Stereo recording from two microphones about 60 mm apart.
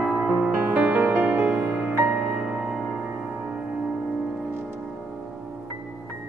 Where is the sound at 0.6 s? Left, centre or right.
Right.